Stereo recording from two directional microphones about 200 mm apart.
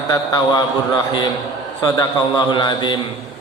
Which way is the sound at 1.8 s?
20° left (ahead or behind).